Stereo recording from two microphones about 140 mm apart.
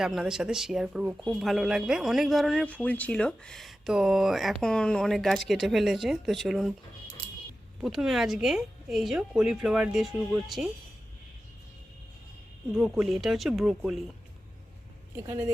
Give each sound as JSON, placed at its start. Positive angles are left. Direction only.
{"t": 0.0, "sound": "speech", "side_deg": -5}
{"t": 7.8, "sound": "speech", "side_deg": 0}
{"t": 12.7, "sound": "speech", "side_deg": 0}
{"t": 15.1, "sound": "speech", "side_deg": -20}